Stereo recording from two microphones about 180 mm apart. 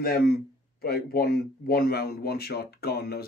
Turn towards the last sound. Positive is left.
turn(degrees=60)  # may be behind; listen again after turning